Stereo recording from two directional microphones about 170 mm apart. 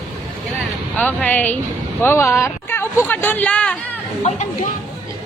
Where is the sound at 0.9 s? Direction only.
10° left (ahead or behind).